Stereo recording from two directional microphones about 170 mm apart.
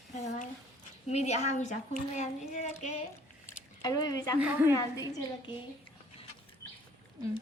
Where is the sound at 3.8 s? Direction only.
20° left (ahead or behind).